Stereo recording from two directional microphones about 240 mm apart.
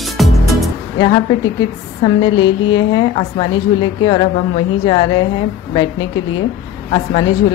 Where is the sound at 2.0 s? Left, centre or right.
Centre.